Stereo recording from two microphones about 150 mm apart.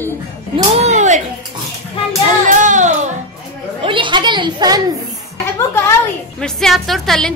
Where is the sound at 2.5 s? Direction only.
55° right (ahead or behind).